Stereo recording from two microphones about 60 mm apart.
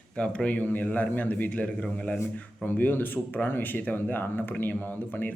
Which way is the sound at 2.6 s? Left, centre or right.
Left.